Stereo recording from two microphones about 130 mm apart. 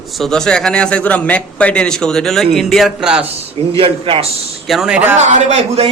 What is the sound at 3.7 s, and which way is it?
Speech, 45° right (ahead or behind).